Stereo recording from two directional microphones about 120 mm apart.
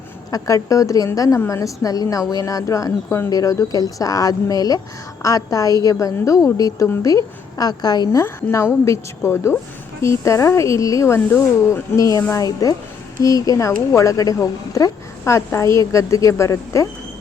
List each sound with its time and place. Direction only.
0.3 s a woman's voice: 30° left (ahead or behind)
8.2 s a woman's voice: 20° left (ahead or behind)